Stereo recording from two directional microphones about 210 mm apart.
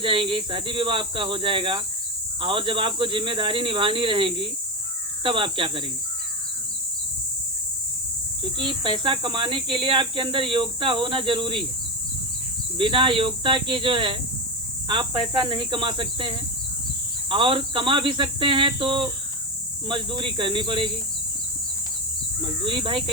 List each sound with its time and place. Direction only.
0.0 s speech: 25° right (ahead or behind)
8.5 s speech: 25° right (ahead or behind)
12.7 s speech: 25° right (ahead or behind)
22.6 s speech: 25° right (ahead or behind)